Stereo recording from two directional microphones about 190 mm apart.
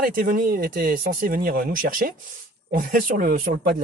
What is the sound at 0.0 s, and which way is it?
Speech, 45° right (ahead or behind).